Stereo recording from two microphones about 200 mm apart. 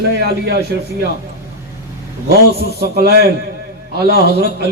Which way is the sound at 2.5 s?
55° right (ahead or behind).